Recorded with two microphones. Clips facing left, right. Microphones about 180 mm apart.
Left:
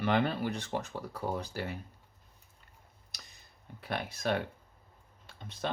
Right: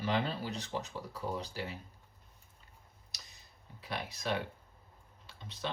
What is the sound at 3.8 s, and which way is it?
Speech, 55° left (ahead or behind).